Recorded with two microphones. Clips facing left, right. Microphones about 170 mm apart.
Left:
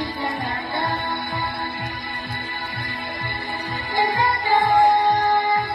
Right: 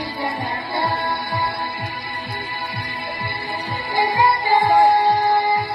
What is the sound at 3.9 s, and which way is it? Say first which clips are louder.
Music: right 3 dB; 15° right (ahead or behind).